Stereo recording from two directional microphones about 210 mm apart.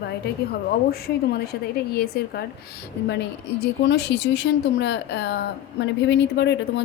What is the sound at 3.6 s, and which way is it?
A woman's voice, 55° left (ahead or behind).